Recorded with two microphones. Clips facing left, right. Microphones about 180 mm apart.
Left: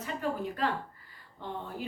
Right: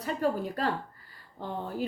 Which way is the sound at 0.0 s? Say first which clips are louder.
Right 4 dB; 35° right (ahead or behind).